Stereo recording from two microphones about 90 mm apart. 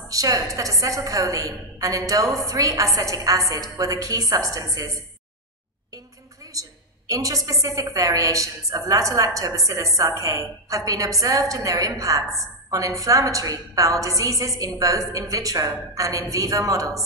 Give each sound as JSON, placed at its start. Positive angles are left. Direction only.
{"t": 0.1, "sound": "a woman's voice", "side_deg": -40}
{"t": 6.5, "sound": "a woman's voice", "side_deg": -40}